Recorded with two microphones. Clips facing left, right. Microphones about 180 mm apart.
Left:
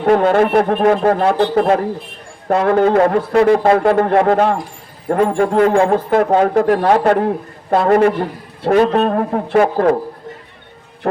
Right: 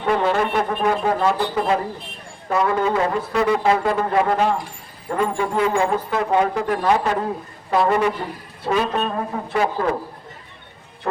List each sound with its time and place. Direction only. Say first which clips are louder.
0.0 s a man's voice: left 7 dB; 55° left (ahead or behind)
11.0 s speech: left 7 dB; 60° left (ahead or behind)